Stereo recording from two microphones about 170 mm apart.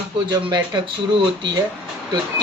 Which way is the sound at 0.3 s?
25° right (ahead or behind).